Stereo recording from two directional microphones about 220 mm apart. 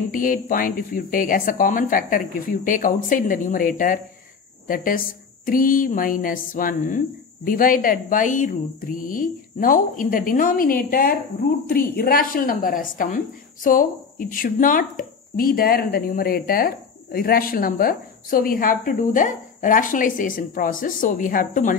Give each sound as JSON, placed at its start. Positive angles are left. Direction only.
{"t": 0.1, "sound": "speech", "side_deg": 40}